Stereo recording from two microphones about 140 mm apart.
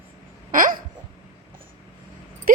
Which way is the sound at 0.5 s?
75° right (ahead or behind).